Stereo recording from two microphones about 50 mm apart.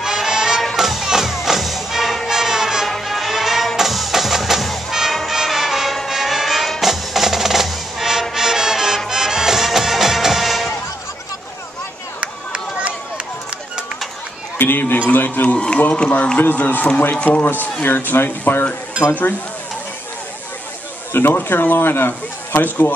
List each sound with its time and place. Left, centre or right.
0.0 s music: centre
2.9 s music: centre
12.2 s run: right
14.6 s a man's voice: left
15.4 s a man's voice: left
16.3 s a man's voice: left
17.8 s speech: left
21.1 s speech: left